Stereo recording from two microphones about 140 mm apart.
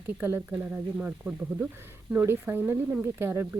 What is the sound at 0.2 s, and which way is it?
Speech, 15° right (ahead or behind).